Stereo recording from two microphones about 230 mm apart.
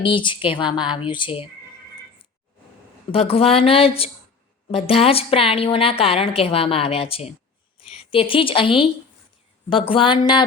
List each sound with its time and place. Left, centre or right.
0.0 s a woman's voice: left
3.1 s a woman's voice: left